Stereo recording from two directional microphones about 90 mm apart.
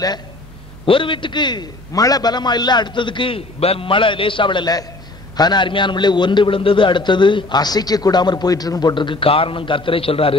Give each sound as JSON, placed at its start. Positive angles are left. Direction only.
{"t": 0.8, "sound": "a man's voice", "side_deg": 70}
{"t": 5.4, "sound": "a man's voice", "side_deg": 55}